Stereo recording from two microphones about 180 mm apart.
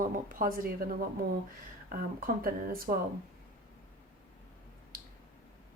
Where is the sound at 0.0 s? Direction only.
50° right (ahead or behind).